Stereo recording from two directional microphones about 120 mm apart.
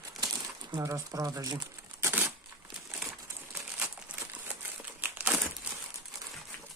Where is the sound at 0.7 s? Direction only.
25° right (ahead or behind).